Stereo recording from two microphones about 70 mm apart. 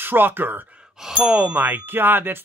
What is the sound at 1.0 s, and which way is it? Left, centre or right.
Speech, centre.